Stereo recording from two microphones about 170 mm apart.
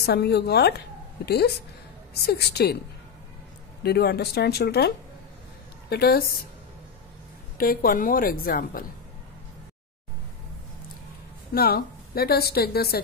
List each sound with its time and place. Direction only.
0.0 s a woman's voice: 70° left (ahead or behind)
3.8 s a woman's voice: 70° left (ahead or behind)
7.5 s a woman's voice: 55° left (ahead or behind)
11.5 s a woman's voice: 65° left (ahead or behind)